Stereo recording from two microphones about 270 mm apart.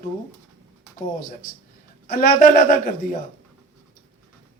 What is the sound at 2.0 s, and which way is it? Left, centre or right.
Speech, left.